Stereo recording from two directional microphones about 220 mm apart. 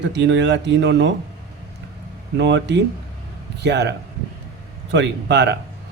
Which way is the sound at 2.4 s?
50° right (ahead or behind).